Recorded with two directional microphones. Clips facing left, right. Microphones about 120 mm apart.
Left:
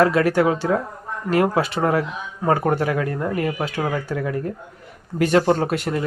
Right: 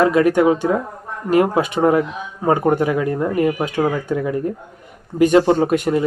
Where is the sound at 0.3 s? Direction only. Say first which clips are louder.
Right 4 dB; 15° right (ahead or behind).